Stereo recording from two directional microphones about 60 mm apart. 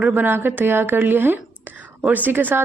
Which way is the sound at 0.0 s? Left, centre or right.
Right.